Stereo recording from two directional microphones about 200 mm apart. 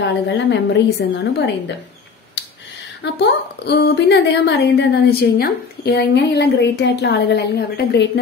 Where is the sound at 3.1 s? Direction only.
55° left (ahead or behind).